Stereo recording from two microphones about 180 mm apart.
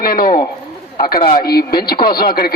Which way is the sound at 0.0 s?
55° left (ahead or behind).